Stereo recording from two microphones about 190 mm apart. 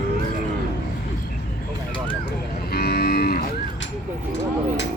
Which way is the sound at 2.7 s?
55° left (ahead or behind).